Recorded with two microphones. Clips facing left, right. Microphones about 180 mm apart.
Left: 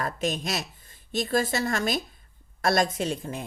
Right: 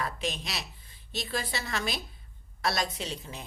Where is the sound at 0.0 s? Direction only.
45° left (ahead or behind).